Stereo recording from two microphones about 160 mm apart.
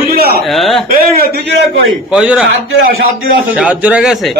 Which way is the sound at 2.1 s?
5° right (ahead or behind).